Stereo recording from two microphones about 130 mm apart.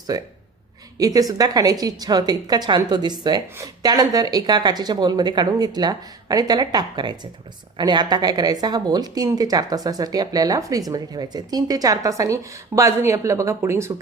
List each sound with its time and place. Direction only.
0.1 s a woman's voice: 30° right (ahead or behind)